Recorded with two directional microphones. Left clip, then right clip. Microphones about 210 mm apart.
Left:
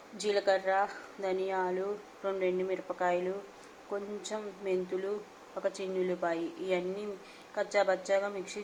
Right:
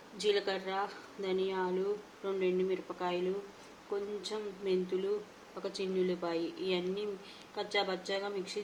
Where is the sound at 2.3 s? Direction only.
Centre (ahead or behind).